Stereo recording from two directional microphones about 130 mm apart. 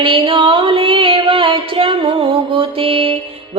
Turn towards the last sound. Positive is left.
turn(degrees=-45)  # may be behind; listen again after turning